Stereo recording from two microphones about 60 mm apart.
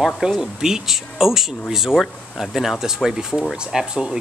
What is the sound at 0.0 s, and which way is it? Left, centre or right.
Speech, centre.